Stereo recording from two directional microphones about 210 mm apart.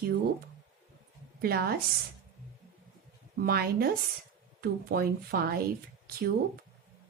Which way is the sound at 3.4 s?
45° right (ahead or behind).